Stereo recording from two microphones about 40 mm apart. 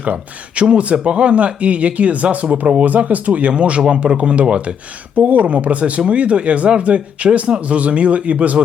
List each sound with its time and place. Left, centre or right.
0.0 s speech: right
0.6 s speech: right
5.1 s speech: right